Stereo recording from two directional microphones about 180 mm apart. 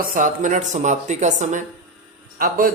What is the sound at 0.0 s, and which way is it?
Speech, 50° right (ahead or behind).